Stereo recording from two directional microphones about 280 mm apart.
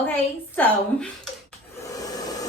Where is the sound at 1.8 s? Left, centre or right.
Centre.